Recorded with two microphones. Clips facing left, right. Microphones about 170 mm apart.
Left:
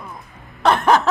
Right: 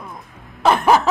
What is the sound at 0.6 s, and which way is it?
Snicker, 5° right (ahead or behind).